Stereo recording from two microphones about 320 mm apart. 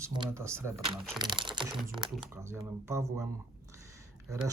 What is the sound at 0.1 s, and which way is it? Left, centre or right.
Speech, centre.